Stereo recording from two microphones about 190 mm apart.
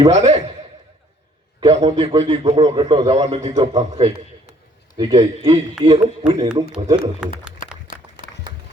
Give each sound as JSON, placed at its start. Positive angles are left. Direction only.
{"t": 0.1, "sound": "a man's voice", "side_deg": -35}
{"t": 1.6, "sound": "a man's voice", "side_deg": -30}
{"t": 3.5, "sound": "speech", "side_deg": -20}
{"t": 3.9, "sound": "a sound", "side_deg": -35}
{"t": 5.1, "sound": "a man's voice", "side_deg": -30}
{"t": 6.5, "sound": "a man's voice", "side_deg": -5}
{"t": 8.5, "sound": "music", "side_deg": -25}